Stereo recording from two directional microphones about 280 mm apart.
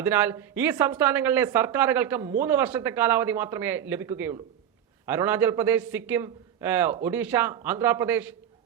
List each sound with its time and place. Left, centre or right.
0.0 s a man's voice: centre